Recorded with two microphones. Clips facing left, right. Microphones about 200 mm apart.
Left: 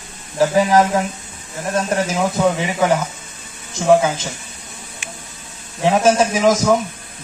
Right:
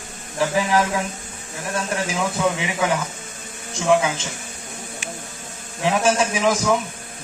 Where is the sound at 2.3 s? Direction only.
40° left (ahead or behind).